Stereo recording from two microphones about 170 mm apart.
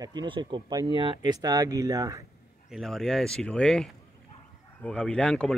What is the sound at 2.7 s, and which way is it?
Speech, centre (ahead or behind).